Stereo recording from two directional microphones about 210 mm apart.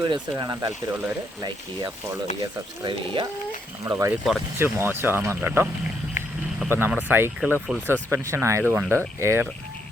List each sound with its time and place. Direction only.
0.0 s speech: 20° right (ahead or behind)